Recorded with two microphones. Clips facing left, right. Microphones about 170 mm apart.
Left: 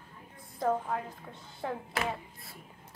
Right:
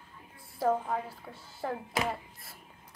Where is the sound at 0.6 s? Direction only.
5° right (ahead or behind).